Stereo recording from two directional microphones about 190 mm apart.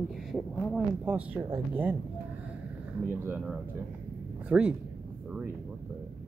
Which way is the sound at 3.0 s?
10° right (ahead or behind).